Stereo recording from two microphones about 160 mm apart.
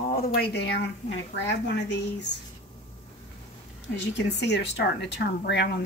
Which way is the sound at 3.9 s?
90° left.